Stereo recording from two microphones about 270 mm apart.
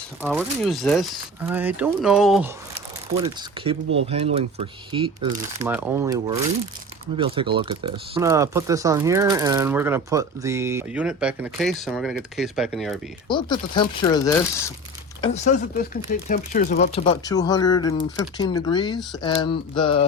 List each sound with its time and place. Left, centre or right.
0.2 s speech: centre
3.2 s speech: centre
5.6 s speech: centre
13.2 s speech: centre
15.2 s speech: left